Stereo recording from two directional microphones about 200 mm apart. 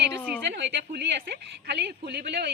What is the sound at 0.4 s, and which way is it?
A woman's voice, 60° right (ahead or behind).